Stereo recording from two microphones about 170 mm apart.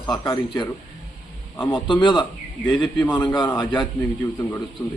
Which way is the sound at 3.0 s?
10° left (ahead or behind).